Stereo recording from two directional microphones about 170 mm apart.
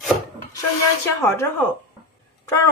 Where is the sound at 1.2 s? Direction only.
15° left (ahead or behind).